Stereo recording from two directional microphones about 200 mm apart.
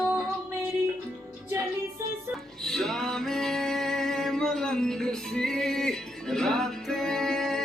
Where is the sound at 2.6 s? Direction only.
Centre (ahead or behind).